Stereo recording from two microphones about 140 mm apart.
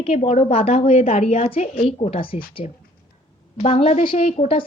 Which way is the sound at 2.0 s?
40° left (ahead or behind).